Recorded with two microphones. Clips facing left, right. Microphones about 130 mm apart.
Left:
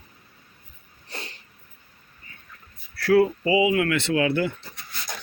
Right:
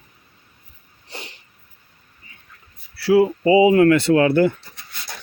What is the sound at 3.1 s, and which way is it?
Speech, 20° right (ahead or behind).